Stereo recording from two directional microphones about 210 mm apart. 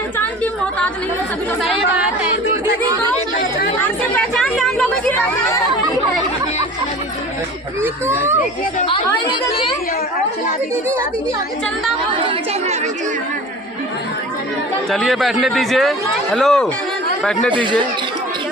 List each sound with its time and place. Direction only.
3.8 s a man's voice: 5° left (ahead or behind)
8.0 s a child's voice: 10° right (ahead or behind)
8.9 s a woman's voice: 25° left (ahead or behind)
14.8 s a man's voice: centre (ahead or behind)
17.5 s speech: 25° right (ahead or behind)